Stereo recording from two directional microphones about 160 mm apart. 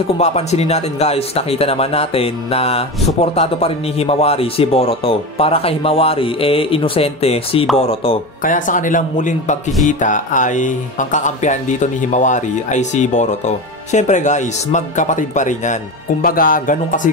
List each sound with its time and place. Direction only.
0.2 s speech: 45° left (ahead or behind)
8.4 s speech: 55° left (ahead or behind)